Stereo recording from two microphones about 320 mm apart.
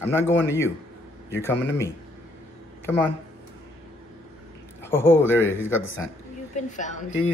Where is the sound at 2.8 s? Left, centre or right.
Centre.